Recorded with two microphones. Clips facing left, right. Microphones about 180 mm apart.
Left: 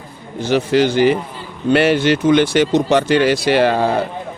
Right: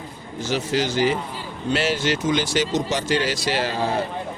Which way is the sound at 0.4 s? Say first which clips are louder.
Left 9 dB; 60° left (ahead or behind).